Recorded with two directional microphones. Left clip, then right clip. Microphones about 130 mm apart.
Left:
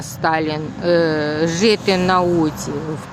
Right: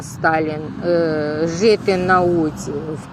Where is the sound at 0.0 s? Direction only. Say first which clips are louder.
Right 1 dB; 35° left (ahead or behind).